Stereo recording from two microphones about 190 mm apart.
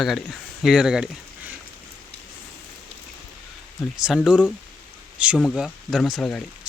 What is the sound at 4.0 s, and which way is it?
Speech, 5° right (ahead or behind).